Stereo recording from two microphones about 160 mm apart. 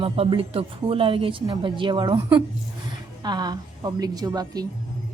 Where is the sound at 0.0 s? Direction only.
35° right (ahead or behind).